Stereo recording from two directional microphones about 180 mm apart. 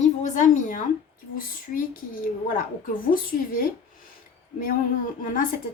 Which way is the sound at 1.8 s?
50° left (ahead or behind).